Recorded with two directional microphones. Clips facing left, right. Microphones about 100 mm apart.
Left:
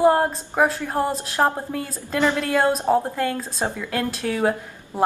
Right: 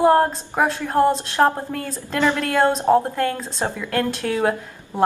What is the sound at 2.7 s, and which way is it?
Speech, 20° right (ahead or behind).